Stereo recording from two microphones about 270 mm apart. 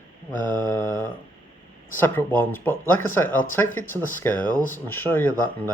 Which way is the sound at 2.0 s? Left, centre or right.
Centre.